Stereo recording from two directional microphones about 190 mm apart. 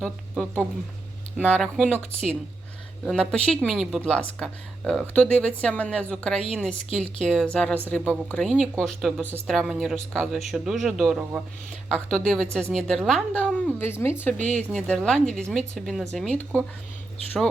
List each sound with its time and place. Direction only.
0.0 s a woman's voice: 5° left (ahead or behind)